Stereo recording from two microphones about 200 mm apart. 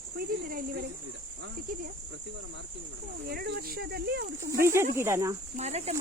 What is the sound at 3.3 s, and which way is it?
Speech, 50° right (ahead or behind).